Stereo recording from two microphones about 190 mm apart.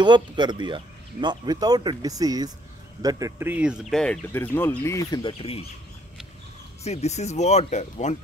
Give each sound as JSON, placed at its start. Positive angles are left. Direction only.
{"t": 0.0, "sound": "speech", "side_deg": -25}
{"t": 3.9, "sound": "speech", "side_deg": 5}
{"t": 6.8, "sound": "speech", "side_deg": 35}